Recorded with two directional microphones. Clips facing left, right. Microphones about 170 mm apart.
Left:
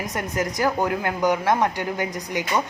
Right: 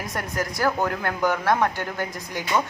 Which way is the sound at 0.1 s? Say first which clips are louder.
Left 2 dB; 20° left (ahead or behind).